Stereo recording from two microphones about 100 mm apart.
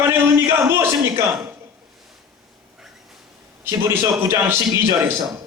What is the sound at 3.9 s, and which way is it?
Speech, 25° right (ahead or behind).